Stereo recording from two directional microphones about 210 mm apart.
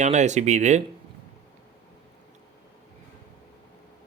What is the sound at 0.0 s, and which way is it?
Speech, 35° right (ahead or behind).